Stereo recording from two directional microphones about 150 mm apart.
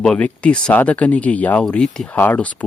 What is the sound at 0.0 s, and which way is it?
Speech, 5° left (ahead or behind).